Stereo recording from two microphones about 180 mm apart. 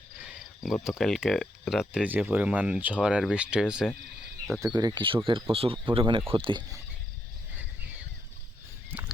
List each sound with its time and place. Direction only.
0.2 s cricket: 5° right (ahead or behind)
4.6 s speech: 20° right (ahead or behind)
8.9 s a sound: 10° right (ahead or behind)